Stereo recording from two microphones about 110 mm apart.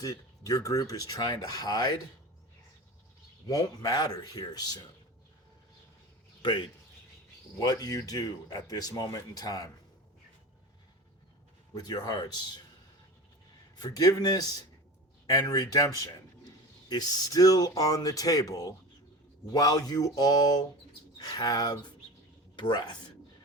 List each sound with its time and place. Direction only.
0.0 s speech: 35° left (ahead or behind)
3.5 s speech: 35° left (ahead or behind)
6.4 s speech: 45° left (ahead or behind)
7.6 s speech: 35° left (ahead or behind)
11.7 s speech: 35° left (ahead or behind)
13.7 s a man's voice: 35° left (ahead or behind)